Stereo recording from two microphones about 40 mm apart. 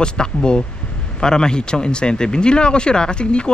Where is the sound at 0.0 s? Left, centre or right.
Left.